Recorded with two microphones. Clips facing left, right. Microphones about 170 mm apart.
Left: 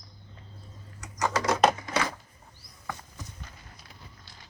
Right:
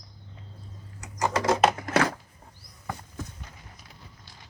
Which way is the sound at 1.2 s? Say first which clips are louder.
Right 2 dB; 25° right (ahead or behind).